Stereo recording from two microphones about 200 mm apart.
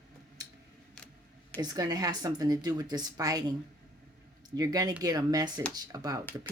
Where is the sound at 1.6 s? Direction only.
20° right (ahead or behind).